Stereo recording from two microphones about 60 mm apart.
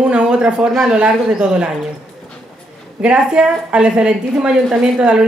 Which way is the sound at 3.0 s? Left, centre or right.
Centre.